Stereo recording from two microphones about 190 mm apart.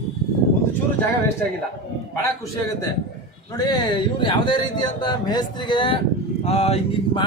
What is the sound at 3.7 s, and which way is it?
A man's voice, 25° left (ahead or behind).